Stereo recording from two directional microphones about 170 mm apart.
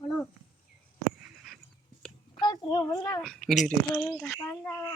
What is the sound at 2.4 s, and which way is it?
Speech, 25° left (ahead or behind).